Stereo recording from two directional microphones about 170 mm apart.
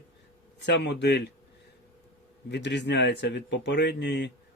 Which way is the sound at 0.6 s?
90° left.